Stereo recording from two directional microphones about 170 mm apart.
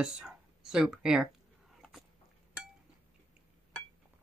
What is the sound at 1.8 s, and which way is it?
Dog, centre (ahead or behind).